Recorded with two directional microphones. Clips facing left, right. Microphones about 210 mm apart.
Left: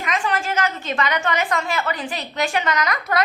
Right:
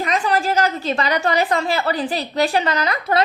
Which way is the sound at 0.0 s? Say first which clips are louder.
Right 4 dB; 35° right (ahead or behind).